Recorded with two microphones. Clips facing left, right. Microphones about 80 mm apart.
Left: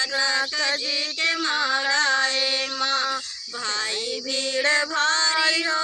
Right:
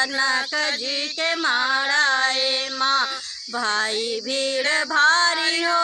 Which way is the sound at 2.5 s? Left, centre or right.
Right.